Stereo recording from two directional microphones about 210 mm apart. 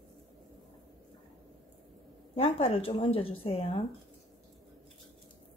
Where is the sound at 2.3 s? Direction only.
30° left (ahead or behind).